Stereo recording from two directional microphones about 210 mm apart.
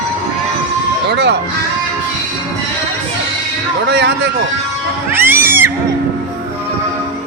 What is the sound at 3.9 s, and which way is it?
Speech, 50° right (ahead or behind).